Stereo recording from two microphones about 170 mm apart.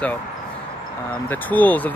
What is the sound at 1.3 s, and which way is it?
Speech, 10° left (ahead or behind).